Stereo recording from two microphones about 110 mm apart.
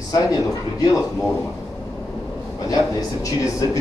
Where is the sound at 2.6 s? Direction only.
30° left (ahead or behind).